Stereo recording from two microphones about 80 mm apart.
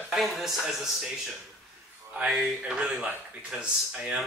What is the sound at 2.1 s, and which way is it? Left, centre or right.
Speech, centre.